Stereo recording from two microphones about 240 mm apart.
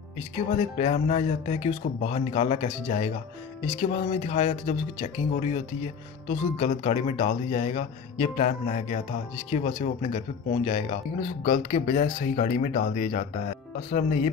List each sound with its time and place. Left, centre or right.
0.4 s speech: left
6.6 s speech: left